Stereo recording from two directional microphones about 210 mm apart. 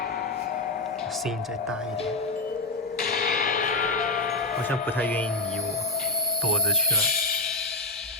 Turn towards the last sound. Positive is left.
turn(degrees=40)  # may be behind; listen again after turning